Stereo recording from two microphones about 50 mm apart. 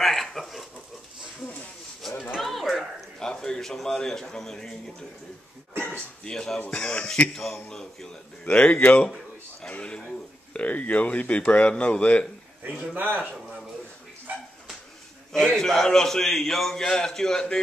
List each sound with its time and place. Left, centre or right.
0.0 s a sound: centre
2.0 s a sound: centre
3.2 s a man's voice: centre
5.8 s a sound: left
6.2 s a man's voice: centre
6.6 s speech: left
7.3 s a man's voice: centre
8.5 s speech: left
12.9 s a man's voice: right
15.3 s a man's voice: centre